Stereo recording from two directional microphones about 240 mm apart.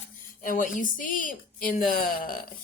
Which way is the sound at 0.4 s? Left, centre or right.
Left.